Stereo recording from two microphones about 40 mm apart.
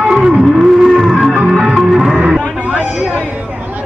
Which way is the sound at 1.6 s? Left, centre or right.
Centre.